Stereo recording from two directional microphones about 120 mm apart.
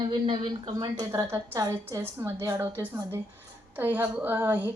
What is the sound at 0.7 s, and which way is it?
A woman's voice, 30° right (ahead or behind).